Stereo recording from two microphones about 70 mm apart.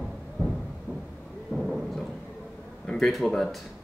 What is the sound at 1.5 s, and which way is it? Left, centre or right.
Thunder, centre.